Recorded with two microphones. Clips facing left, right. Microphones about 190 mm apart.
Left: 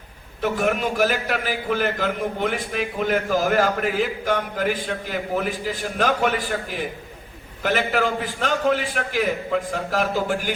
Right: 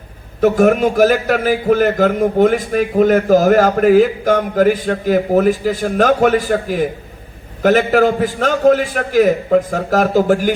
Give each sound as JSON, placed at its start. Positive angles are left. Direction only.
{"t": 0.4, "sound": "a man's voice", "side_deg": -45}